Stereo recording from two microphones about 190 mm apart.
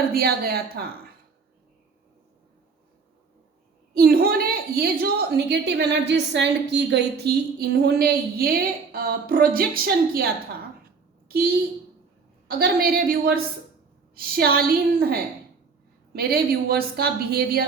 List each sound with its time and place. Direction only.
0.1 s a woman's voice: 55° right (ahead or behind)
3.9 s a woman's voice: 50° right (ahead or behind)
11.3 s a woman's voice: 50° right (ahead or behind)